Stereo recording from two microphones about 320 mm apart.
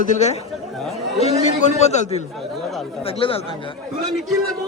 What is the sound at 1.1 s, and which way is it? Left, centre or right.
A man's voice, left.